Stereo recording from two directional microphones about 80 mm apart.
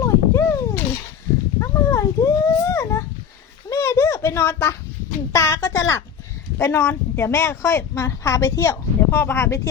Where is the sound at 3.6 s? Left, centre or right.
Left.